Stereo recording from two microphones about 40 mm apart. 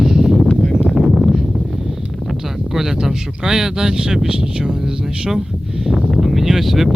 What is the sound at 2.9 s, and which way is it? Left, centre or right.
Speech, centre.